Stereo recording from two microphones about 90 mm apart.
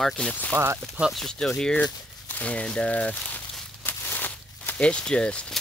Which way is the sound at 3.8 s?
20° left (ahead or behind).